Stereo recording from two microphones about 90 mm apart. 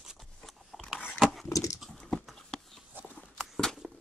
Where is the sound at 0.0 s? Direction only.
Centre (ahead or behind).